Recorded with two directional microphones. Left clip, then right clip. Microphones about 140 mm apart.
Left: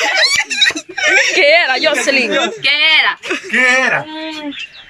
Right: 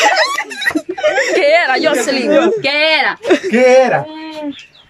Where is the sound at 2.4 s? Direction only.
90° right.